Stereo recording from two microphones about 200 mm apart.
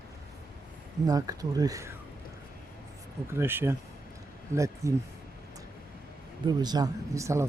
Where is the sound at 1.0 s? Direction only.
20° right (ahead or behind).